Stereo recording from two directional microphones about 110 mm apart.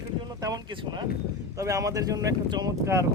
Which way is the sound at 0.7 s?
50° right (ahead or behind).